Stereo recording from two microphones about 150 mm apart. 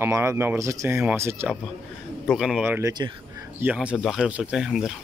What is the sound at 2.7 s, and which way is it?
Speech, 15° right (ahead or behind).